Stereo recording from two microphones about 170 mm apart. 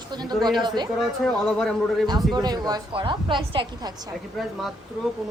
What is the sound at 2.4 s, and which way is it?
Speech, 25° right (ahead or behind).